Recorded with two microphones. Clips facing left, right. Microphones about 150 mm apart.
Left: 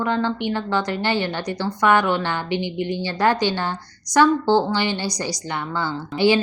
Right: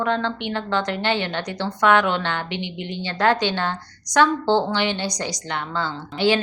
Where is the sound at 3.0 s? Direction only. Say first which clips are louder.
Right 1 dB; 5° left (ahead or behind).